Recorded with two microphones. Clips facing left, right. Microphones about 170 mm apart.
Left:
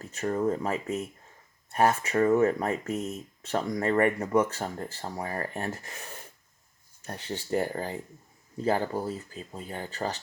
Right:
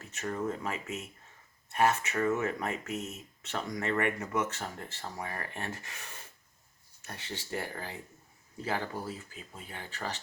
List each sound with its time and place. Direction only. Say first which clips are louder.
0.0 s speech: left 7 dB; 35° left (ahead or behind)
7.3 s speech: left 9 dB; 45° left (ahead or behind)